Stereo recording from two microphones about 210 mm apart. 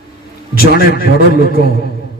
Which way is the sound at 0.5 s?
45° left (ahead or behind).